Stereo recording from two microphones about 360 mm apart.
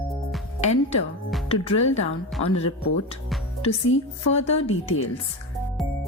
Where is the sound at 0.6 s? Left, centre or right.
Centre.